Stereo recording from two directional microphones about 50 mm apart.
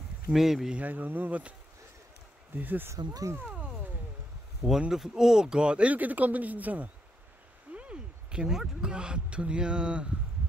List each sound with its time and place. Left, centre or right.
0.3 s speech: centre
0.8 s speech: right
2.5 s speech: right
4.7 s speech: centre; by 6.9 s right
7.7 s a sound: right
8.8 s speech: centre